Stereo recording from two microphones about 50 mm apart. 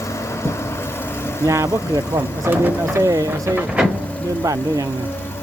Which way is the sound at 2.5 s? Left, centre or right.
Right.